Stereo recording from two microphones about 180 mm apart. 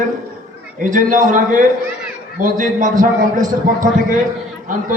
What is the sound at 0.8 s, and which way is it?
Speech, 45° right (ahead or behind).